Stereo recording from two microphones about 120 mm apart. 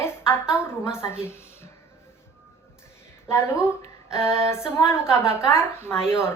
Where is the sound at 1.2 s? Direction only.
20° left (ahead or behind).